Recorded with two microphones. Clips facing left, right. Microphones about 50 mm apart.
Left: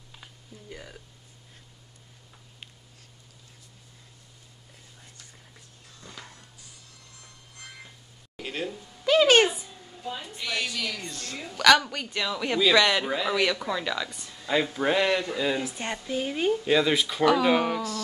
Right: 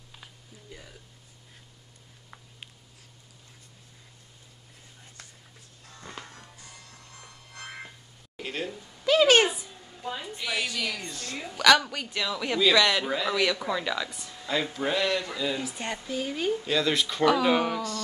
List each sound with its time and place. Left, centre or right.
5.9 s music: right
8.4 s a sound: centre
10.1 s a woman's voice: centre
14.5 s speech: centre
16.9 s a woman's voice: centre